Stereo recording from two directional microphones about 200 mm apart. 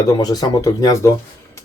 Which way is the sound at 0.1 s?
20° left (ahead or behind).